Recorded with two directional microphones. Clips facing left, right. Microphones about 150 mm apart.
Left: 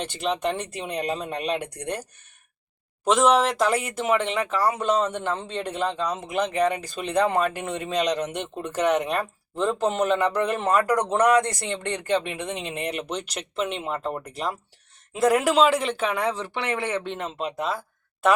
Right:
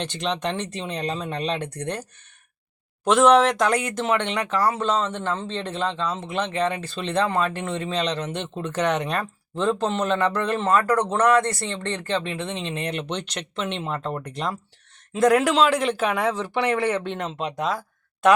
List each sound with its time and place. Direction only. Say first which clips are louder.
0.0 s speech: left 1 dB; 5° left (ahead or behind)